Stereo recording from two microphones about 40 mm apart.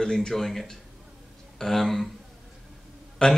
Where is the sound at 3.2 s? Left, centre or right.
Left.